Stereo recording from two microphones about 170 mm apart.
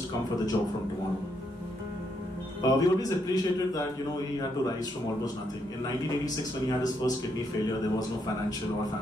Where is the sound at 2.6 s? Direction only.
20° left (ahead or behind).